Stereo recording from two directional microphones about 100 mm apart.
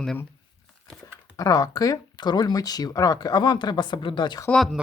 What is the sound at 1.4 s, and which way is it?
Speech, 40° left (ahead or behind).